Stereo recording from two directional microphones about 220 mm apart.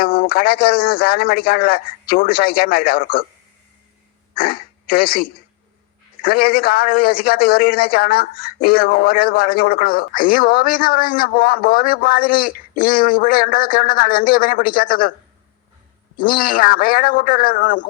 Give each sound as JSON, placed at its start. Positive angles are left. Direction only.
{"t": 0.0, "sound": "a man's voice", "side_deg": 40}
{"t": 4.4, "sound": "a man's voice", "side_deg": 40}
{"t": 16.2, "sound": "a man's voice", "side_deg": 40}